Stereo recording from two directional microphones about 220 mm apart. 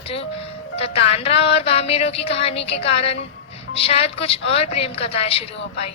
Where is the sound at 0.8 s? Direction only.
25° left (ahead or behind).